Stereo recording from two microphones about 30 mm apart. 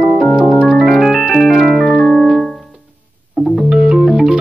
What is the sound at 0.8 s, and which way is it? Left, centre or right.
Music, centre.